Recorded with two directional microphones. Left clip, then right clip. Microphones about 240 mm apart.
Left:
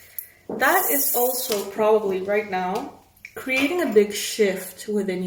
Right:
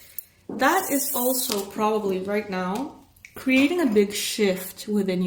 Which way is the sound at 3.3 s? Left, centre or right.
Right.